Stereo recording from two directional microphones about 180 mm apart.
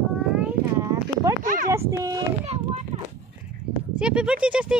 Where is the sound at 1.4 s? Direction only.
45° right (ahead or behind).